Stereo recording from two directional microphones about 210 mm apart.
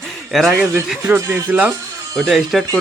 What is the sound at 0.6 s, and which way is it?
Speech, 10° right (ahead or behind).